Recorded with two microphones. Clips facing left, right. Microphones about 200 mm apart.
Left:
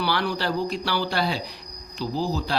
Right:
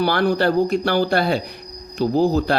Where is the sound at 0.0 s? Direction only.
50° right (ahead or behind).